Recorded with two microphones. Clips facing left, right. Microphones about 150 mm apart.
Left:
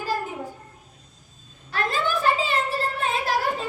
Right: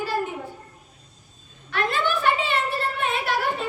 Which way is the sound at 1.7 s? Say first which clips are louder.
Right 1 dB; 40° left (ahead or behind).